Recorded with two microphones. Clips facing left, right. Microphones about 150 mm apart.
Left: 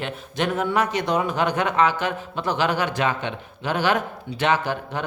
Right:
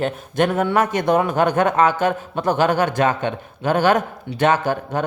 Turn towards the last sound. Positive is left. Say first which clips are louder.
# right 5 dB
turn(degrees=-45)  # may be behind; listen again after turning